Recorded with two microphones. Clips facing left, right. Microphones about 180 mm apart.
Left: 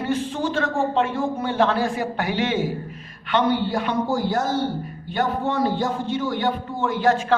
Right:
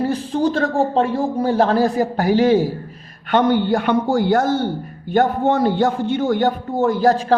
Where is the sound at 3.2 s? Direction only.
50° right (ahead or behind).